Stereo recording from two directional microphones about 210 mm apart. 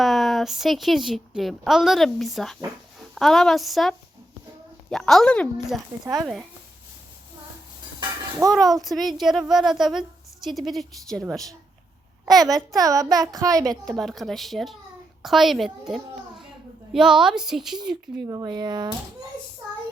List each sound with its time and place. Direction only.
0.0 s a woman's voice: centre (ahead or behind)
6.1 s a child's voice: 15° right (ahead or behind)
8.5 s a woman's voice: centre (ahead or behind)
12.7 s a child's voice: 15° right (ahead or behind)
13.8 s a woman's voice: centre (ahead or behind)
17.7 s speech: 20° right (ahead or behind)